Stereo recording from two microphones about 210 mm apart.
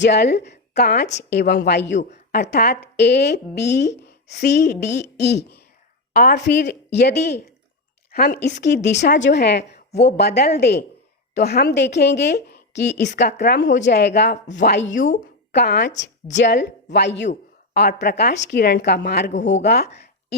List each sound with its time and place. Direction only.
0.0 s a woman's voice: 55° left (ahead or behind)
2.0 s a woman's voice: 35° left (ahead or behind)
2.3 s speech: 50° left (ahead or behind)
14.9 s speech: 40° left (ahead or behind)
19.3 s speech: 35° left (ahead or behind)
19.6 s speech: 50° left (ahead or behind)